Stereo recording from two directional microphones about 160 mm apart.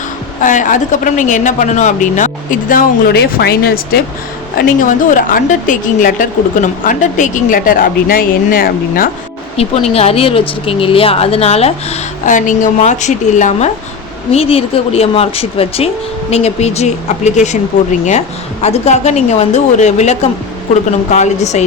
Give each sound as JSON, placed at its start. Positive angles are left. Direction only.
{"t": 0.4, "sound": "a woman's voice", "side_deg": 55}
{"t": 4.5, "sound": "a woman's voice", "side_deg": 60}
{"t": 9.6, "sound": "speech", "side_deg": 40}
{"t": 14.3, "sound": "a woman's voice", "side_deg": 35}
{"t": 18.6, "sound": "a woman's voice", "side_deg": 45}